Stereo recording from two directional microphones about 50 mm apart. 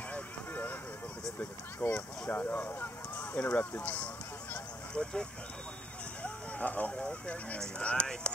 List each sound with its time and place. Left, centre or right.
0.1 s vehicle: left
1.4 s speech: left
6.2 s speech: left